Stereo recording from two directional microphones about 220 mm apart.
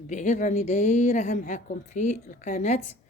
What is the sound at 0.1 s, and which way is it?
Speech, 35° left (ahead or behind).